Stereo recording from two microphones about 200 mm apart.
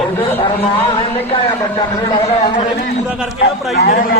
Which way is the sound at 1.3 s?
20° left (ahead or behind).